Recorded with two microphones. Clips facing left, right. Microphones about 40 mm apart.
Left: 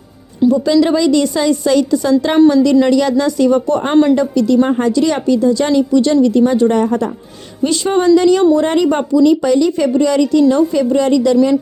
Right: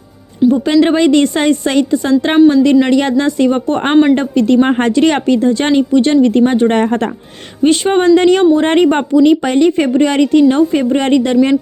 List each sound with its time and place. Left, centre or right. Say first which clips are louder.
0.5 s speech: right 1 dB; right